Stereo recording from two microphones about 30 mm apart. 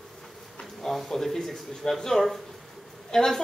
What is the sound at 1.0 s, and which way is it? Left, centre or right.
A man's voice, centre.